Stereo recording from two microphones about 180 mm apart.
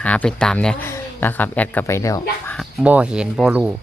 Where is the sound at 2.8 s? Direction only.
5° right (ahead or behind).